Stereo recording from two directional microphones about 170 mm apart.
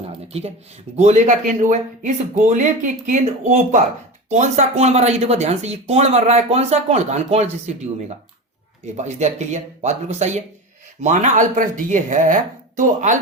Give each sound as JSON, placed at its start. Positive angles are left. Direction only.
{"t": 0.9, "sound": "speech", "side_deg": -45}
{"t": 9.0, "sound": "speech", "side_deg": -45}